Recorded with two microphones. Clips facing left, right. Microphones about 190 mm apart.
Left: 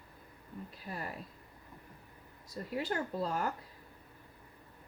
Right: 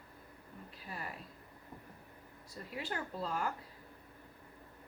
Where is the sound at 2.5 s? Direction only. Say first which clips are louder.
Left 6 dB; 40° left (ahead or behind).